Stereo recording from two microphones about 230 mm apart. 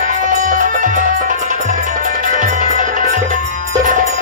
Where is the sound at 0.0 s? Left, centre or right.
Right.